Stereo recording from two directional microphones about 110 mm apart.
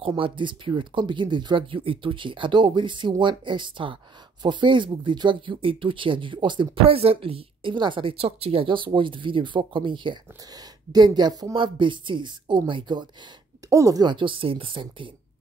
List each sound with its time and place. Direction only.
0.0 s speech: 50° right (ahead or behind)
10.9 s speech: 35° right (ahead or behind)
13.7 s speech: 30° right (ahead or behind)
14.0 s speech: 50° right (ahead or behind)